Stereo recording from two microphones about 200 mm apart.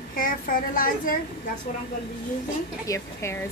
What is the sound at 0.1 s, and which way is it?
A child's voice, 45° left (ahead or behind).